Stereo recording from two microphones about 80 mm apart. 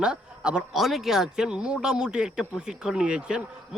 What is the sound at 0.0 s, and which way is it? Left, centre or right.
Speech, centre.